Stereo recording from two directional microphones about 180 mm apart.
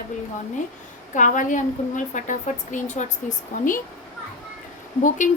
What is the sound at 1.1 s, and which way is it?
Speech, 45° left (ahead or behind).